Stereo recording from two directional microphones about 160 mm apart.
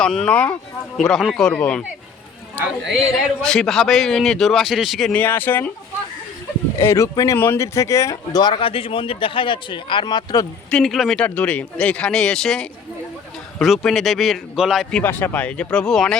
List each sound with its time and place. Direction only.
0.0 s a man's voice: 5° left (ahead or behind)
3.4 s a man's voice: 5° left (ahead or behind)
6.7 s speech: 15° left (ahead or behind)
10.7 s a man's voice: 5° left (ahead or behind)